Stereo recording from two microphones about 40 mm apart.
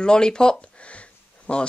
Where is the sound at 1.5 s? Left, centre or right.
Left.